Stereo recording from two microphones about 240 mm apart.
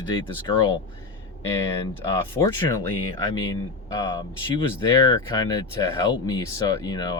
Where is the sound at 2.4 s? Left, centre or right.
Centre.